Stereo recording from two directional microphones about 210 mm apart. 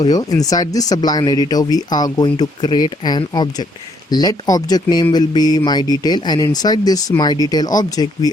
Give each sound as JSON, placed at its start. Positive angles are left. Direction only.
{"t": 0.0, "sound": "speech", "side_deg": 20}